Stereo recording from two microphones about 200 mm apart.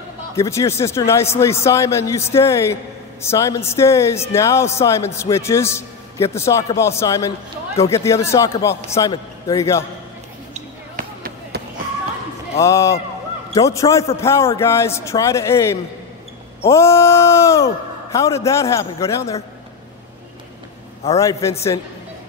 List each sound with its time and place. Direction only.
0.4 s a man's voice: 15° left (ahead or behind)
10.5 s basketball bounce: 45° right (ahead or behind)
12.5 s a man's voice: 15° left (ahead or behind)
21.2 s a man's voice: 15° left (ahead or behind)